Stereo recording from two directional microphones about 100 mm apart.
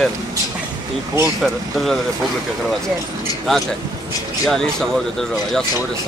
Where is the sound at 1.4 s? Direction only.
Centre (ahead or behind).